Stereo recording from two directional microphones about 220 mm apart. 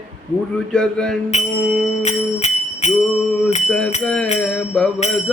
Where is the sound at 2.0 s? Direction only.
30° left (ahead or behind).